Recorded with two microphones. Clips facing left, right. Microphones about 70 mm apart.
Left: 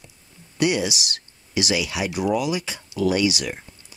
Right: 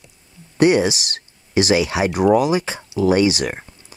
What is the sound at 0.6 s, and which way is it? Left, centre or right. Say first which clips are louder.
Speech: right 7 dB; right.